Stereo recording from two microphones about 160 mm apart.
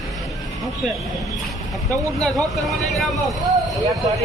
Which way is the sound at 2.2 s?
Centre (ahead or behind).